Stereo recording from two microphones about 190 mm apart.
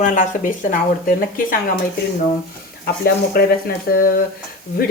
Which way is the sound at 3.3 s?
55° left (ahead or behind).